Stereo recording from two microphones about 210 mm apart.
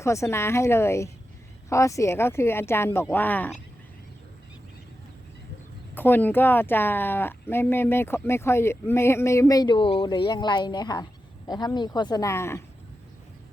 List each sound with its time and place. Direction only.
0.0 s speech: 15° left (ahead or behind)
5.9 s speech: 10° left (ahead or behind)